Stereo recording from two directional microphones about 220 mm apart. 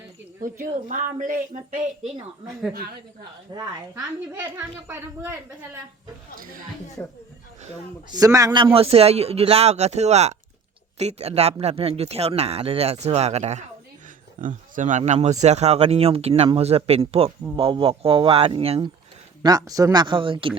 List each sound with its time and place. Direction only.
0.4 s speech: 40° right (ahead or behind)
2.5 s a woman's voice: centre (ahead or behind)
3.5 s a woman's voice: 15° right (ahead or behind)
6.3 s speech: 40° right (ahead or behind)
7.0 s speech: 10° left (ahead or behind)
8.1 s speech: 15° right (ahead or behind)